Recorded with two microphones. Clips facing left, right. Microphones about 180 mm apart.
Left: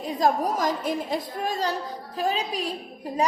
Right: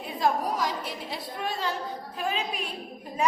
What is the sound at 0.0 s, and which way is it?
A woman's voice, 40° left (ahead or behind).